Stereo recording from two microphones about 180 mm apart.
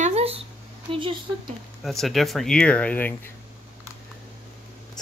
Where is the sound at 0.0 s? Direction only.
35° right (ahead or behind).